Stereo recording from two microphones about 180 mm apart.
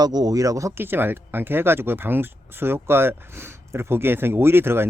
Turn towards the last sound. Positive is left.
turn(degrees=-15)  # may be behind; listen again after turning